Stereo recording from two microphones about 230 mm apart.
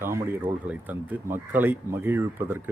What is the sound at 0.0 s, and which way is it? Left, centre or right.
Speech, centre.